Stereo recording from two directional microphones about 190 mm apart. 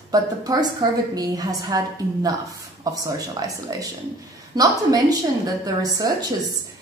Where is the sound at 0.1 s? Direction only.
20° right (ahead or behind).